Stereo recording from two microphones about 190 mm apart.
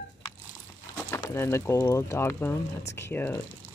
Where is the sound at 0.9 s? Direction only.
15° left (ahead or behind).